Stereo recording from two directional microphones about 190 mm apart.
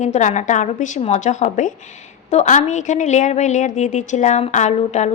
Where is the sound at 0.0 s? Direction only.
40° left (ahead or behind).